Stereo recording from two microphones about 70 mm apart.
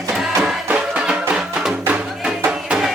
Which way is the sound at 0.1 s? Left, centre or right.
Centre.